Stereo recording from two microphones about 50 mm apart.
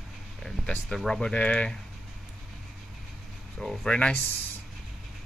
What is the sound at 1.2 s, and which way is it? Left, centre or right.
Speech, left.